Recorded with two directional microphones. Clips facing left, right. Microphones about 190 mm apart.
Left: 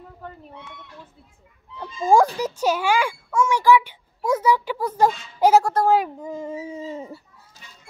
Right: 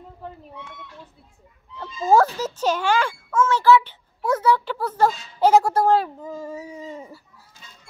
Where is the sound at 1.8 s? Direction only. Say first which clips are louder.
Even; 15° left (ahead or behind).